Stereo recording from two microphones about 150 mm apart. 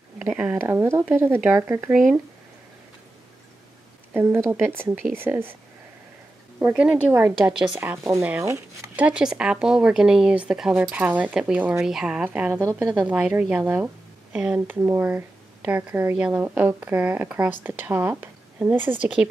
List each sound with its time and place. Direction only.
0.2 s speech: 10° right (ahead or behind)
1.9 s speech: centre (ahead or behind)
4.1 s speech: 15° right (ahead or behind)
6.7 s speech: 5° right (ahead or behind)
7.5 s speech: 5° right (ahead or behind)
7.8 s speech: 20° right (ahead or behind)
9.0 s speech: 5° right (ahead or behind)